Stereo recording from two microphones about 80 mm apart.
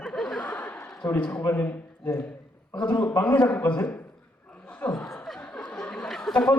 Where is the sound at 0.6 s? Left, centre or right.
Left.